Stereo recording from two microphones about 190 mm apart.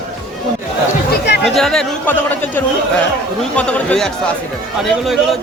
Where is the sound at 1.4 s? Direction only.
Centre (ahead or behind).